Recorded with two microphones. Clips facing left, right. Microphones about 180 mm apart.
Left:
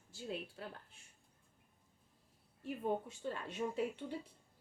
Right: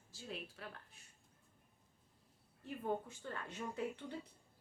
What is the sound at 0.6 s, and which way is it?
Speech, 30° left (ahead or behind).